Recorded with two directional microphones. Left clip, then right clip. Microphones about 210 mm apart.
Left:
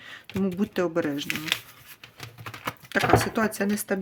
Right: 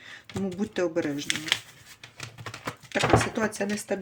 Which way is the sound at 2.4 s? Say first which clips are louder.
Left 3 dB; 20° left (ahead or behind).